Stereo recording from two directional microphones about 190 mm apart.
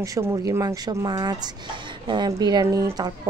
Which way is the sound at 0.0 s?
15° right (ahead or behind).